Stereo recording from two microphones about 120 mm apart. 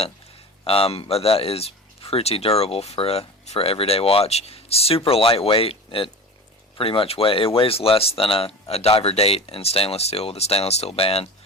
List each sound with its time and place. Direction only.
0.6 s speech: 50° left (ahead or behind)